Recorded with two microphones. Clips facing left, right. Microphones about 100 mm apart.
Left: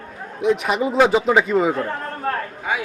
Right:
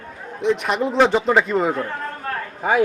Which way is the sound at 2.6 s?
45° right (ahead or behind).